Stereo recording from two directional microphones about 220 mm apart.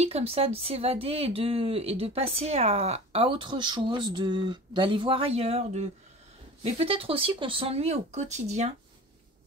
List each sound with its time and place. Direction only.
0.0 s speech: 25° right (ahead or behind)